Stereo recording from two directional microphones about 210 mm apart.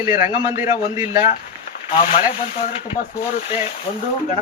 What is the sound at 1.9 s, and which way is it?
Speech, 30° left (ahead or behind).